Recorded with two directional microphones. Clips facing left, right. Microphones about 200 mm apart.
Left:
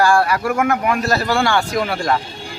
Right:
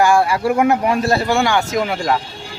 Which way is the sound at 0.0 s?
20° right (ahead or behind).